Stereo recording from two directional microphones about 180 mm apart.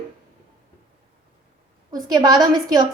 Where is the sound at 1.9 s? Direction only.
20° right (ahead or behind).